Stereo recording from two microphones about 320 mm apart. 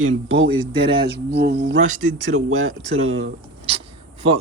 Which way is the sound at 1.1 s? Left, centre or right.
Right.